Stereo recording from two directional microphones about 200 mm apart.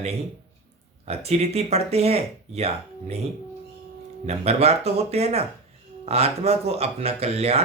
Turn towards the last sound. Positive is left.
turn(degrees=-30)  # may be behind; listen again after turning